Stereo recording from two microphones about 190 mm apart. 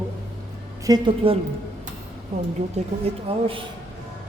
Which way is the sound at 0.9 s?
25° right (ahead or behind).